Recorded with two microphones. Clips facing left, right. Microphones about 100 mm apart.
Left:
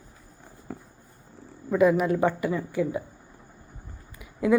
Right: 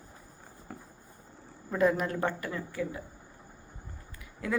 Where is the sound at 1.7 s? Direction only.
5° left (ahead or behind).